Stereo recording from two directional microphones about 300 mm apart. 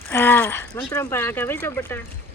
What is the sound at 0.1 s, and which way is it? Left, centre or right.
Speech, centre.